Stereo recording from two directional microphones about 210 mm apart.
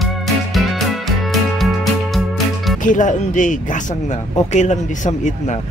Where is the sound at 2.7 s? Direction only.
35° left (ahead or behind).